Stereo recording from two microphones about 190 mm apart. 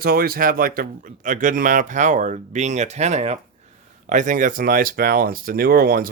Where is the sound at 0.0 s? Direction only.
50° right (ahead or behind).